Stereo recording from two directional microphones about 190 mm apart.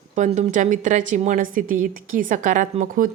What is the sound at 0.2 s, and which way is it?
A woman's voice, 35° right (ahead or behind).